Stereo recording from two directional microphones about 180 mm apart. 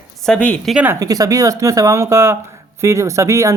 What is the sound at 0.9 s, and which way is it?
Speech, 20° right (ahead or behind).